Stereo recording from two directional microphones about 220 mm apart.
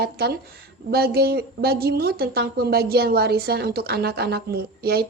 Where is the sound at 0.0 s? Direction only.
45° right (ahead or behind).